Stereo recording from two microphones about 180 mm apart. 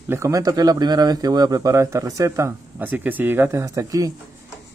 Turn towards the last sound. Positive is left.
turn(degrees=-20)  # may be behind; listen again after turning